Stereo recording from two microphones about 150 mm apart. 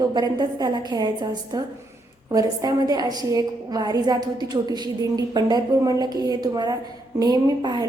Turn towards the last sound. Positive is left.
turn(degrees=-25)  # may be behind; listen again after turning